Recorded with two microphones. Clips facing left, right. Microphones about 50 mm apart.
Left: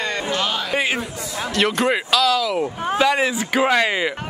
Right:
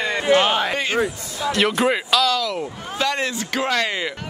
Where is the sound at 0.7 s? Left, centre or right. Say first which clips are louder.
Even; centre.